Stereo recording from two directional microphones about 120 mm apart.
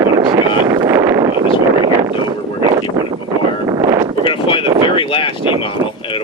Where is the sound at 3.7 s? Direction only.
35° right (ahead or behind).